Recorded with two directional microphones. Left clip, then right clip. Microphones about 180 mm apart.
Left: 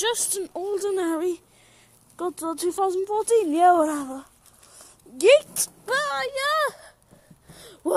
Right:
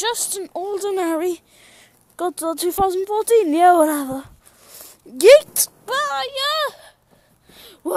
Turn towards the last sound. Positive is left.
turn(degrees=-20)  # may be behind; listen again after turning